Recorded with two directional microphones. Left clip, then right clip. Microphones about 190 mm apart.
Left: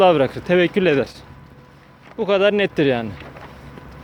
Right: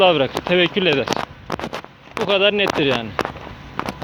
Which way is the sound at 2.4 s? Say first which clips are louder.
Even; 35° left (ahead or behind).